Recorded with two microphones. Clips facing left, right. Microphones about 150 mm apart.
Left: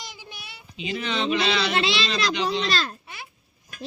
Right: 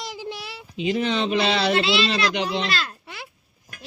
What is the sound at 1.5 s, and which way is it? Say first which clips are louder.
Child singing: right 3 dB; 40° right (ahead or behind).